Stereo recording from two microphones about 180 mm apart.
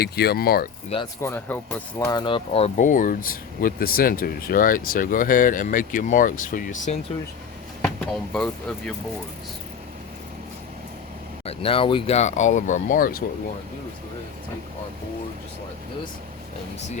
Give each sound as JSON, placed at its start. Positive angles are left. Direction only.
{"t": 0.0, "sound": "speech", "side_deg": 60}
{"t": 1.2, "sound": "speech", "side_deg": 10}
{"t": 2.1, "sound": "speech", "side_deg": 30}
{"t": 7.8, "sound": "speech", "side_deg": 5}
{"t": 11.4, "sound": "speech", "side_deg": 30}